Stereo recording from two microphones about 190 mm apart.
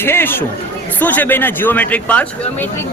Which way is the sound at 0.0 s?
10° left (ahead or behind).